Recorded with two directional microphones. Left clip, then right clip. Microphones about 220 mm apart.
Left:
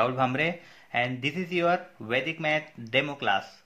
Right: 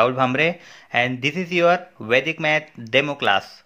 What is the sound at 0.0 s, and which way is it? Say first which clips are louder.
Speech: right 7 dB; 25° right (ahead or behind).